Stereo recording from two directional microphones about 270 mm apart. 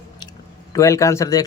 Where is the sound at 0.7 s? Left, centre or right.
Centre.